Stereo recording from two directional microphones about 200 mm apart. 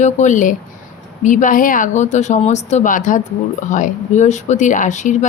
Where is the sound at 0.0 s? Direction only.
35° left (ahead or behind).